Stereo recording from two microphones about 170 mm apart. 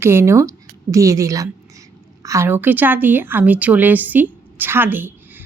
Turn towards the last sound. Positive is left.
turn(degrees=-10)  # may be behind; listen again after turning